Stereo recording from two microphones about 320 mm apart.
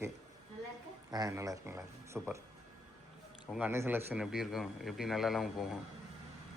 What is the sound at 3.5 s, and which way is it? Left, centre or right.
A man's voice, centre.